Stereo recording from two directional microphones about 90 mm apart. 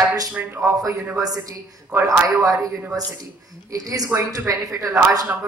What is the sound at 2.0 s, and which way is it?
Speech, 35° right (ahead or behind).